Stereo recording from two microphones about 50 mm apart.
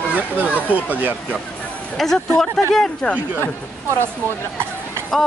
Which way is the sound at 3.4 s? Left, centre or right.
Left.